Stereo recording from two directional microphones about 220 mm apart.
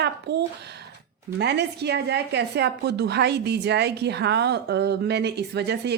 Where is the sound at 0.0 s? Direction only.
50° right (ahead or behind).